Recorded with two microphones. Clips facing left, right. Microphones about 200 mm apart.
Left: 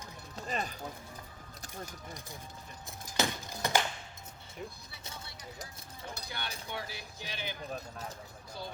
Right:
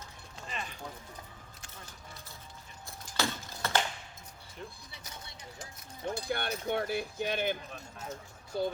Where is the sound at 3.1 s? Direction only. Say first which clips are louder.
Left 1 dB; 15° left (ahead or behind).